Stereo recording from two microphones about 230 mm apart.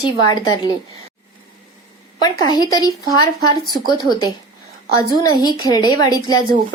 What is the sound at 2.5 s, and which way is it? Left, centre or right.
Speech, centre.